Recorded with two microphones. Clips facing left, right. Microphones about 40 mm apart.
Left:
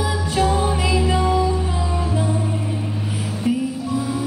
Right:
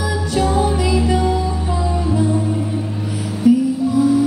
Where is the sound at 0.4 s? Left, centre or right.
Centre.